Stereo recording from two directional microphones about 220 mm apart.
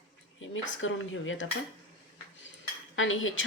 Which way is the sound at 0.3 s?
65° left (ahead or behind).